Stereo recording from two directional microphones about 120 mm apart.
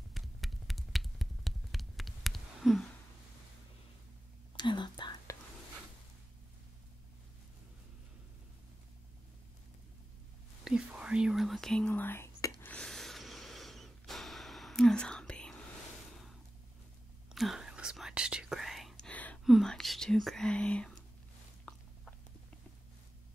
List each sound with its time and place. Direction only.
0.1 s a sound: centre (ahead or behind)
4.6 s whispering: 40° left (ahead or behind)
10.6 s whispering: 5° right (ahead or behind); by 12.5 s 25° left (ahead or behind)
12.6 s snort: 5° left (ahead or behind)
16.1 s a sound: centre (ahead or behind)
17.3 s whispering: centre (ahead or behind)
19.4 s whispering: centre (ahead or behind)